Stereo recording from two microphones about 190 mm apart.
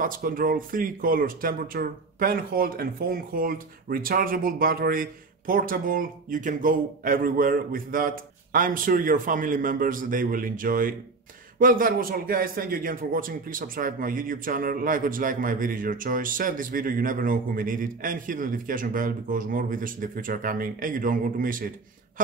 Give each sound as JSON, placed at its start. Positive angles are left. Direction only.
{"t": 0.0, "sound": "a man's voice", "side_deg": -50}